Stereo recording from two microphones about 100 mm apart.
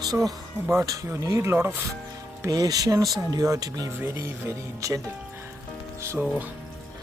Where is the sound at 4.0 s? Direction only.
30° right (ahead or behind).